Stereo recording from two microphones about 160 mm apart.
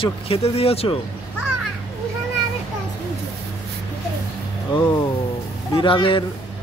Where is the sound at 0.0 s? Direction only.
40° left (ahead or behind).